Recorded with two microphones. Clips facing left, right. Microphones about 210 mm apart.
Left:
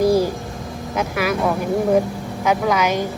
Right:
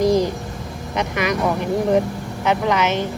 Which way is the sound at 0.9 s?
5° left (ahead or behind).